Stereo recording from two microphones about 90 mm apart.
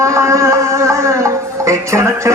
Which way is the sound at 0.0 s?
35° right (ahead or behind).